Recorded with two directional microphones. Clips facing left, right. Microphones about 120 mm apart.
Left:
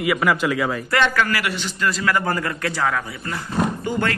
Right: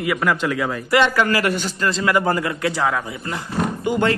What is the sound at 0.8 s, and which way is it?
Speech, 15° right (ahead or behind).